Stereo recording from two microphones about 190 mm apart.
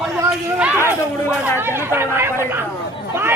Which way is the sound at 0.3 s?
10° right (ahead or behind).